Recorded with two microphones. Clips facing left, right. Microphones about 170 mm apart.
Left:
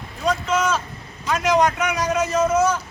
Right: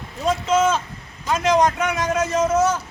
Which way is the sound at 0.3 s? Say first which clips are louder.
Right 2 dB; 25° right (ahead or behind).